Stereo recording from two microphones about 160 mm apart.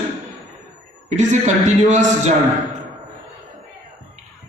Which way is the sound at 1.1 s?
50° right (ahead or behind).